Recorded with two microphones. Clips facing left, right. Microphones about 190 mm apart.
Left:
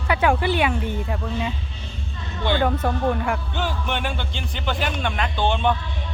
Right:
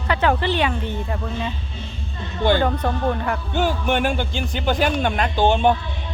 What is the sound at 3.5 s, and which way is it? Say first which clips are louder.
Speech: right 6 dB; 45° right (ahead or behind).